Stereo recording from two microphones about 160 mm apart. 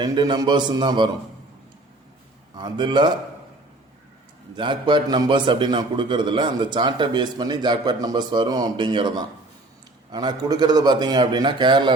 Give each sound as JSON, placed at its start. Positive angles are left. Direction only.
{"t": 0.0, "sound": "a man's voice", "side_deg": -25}
{"t": 2.6, "sound": "a man's voice", "side_deg": -30}
{"t": 4.5, "sound": "a man's voice", "side_deg": -30}